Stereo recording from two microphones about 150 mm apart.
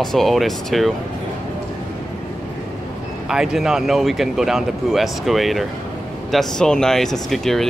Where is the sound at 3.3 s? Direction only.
5° right (ahead or behind).